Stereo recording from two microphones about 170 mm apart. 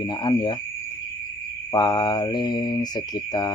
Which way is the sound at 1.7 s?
25° left (ahead or behind).